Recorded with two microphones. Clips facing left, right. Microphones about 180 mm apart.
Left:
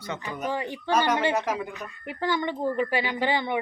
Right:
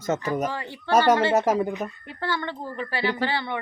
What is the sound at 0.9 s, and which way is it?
Speech, 40° right (ahead or behind).